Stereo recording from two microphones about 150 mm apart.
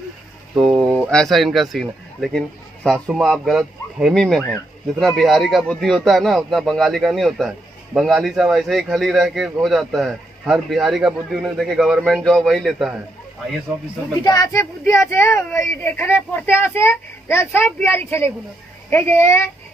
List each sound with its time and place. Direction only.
0.6 s a sound: centre (ahead or behind)
1.1 s speech: centre (ahead or behind)
14.2 s speech: 25° left (ahead or behind)